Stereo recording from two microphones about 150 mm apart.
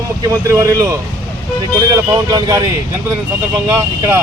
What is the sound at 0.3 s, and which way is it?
Speech, 20° right (ahead or behind).